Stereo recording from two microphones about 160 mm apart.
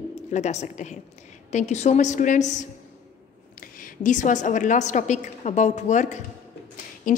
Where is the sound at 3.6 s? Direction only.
60° left (ahead or behind).